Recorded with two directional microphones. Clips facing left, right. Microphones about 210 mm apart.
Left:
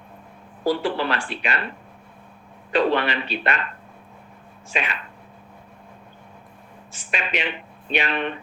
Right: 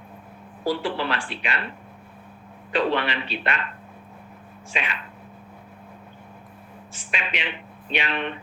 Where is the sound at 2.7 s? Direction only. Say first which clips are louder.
Left 3 dB; 45° left (ahead or behind).